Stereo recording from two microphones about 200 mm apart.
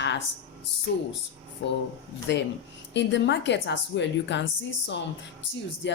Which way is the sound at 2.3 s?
60° left (ahead or behind).